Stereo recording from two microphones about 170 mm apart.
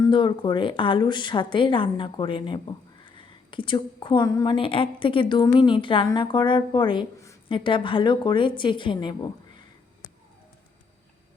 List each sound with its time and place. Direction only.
0.1 s a woman's voice: 30° left (ahead or behind)
4.3 s a woman's voice: 20° left (ahead or behind)
4.5 s speech: 30° left (ahead or behind)